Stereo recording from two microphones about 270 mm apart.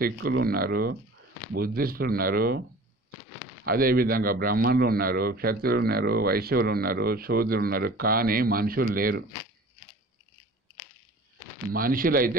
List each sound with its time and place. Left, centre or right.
0.0 s speech: right
3.6 s speech: right
11.7 s speech: right